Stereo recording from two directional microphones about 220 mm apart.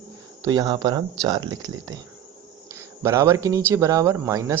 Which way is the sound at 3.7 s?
15° right (ahead or behind).